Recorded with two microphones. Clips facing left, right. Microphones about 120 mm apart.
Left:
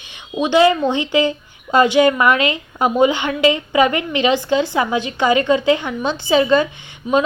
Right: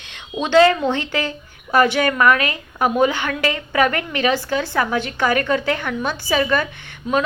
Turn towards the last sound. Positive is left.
turn(degrees=5)  # may be behind; listen again after turning